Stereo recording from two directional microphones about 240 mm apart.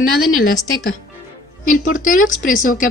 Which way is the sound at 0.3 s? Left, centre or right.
Left.